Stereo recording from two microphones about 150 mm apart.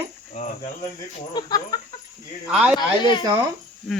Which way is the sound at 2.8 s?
30° left (ahead or behind).